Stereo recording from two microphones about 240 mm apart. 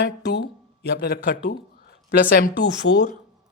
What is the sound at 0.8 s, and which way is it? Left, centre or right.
Speech, left.